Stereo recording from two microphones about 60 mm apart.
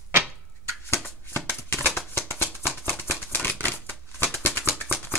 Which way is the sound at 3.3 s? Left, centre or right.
Left.